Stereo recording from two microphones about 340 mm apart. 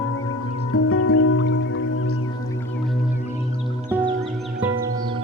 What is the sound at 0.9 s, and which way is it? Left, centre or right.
Music, left.